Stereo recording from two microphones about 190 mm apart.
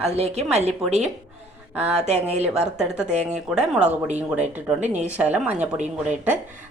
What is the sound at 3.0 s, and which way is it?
Speech, 35° right (ahead or behind).